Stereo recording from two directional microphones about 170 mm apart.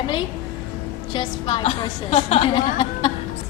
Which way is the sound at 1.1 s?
25° left (ahead or behind).